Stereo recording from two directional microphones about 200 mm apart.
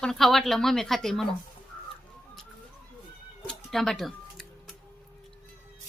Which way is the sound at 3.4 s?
Centre (ahead or behind).